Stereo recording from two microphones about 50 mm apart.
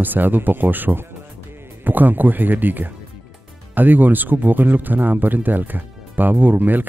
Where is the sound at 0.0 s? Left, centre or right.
Right.